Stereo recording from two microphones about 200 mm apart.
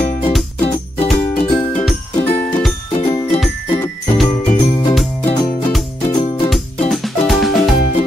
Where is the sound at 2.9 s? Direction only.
25° left (ahead or behind).